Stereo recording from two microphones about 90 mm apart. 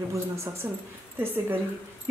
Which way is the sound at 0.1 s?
30° right (ahead or behind).